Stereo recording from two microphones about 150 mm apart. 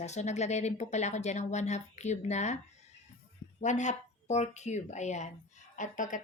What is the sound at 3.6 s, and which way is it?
Speech, 55° left (ahead or behind).